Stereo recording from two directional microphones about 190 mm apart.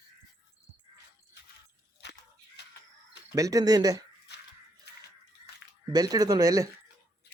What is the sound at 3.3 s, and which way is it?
Speech, 20° right (ahead or behind).